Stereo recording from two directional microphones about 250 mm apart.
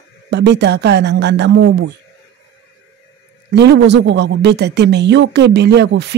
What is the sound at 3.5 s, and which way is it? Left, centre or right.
Speech, right.